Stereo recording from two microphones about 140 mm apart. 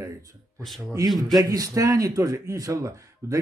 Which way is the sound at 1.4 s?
25° right (ahead or behind).